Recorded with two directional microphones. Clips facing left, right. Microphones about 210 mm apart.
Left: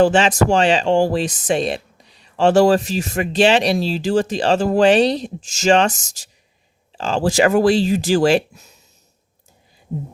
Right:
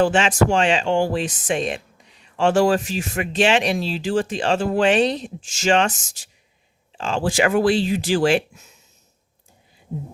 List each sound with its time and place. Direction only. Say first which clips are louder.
0.0 s speech: left 3 dB; 40° left (ahead or behind)